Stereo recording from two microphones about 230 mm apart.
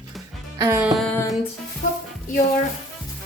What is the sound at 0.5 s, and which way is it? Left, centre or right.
Music, centre.